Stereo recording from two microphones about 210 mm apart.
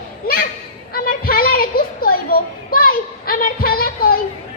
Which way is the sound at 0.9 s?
45° left (ahead or behind).